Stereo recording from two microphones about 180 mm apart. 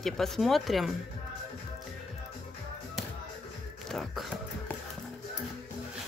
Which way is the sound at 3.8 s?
Centre (ahead or behind).